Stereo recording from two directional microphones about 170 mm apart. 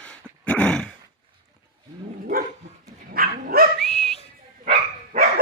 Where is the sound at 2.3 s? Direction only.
60° right (ahead or behind).